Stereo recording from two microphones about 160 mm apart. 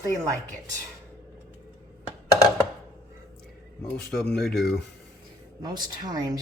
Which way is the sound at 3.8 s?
5° left (ahead or behind).